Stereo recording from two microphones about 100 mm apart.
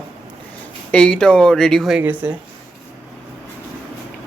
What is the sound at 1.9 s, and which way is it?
Speech, 15° right (ahead or behind).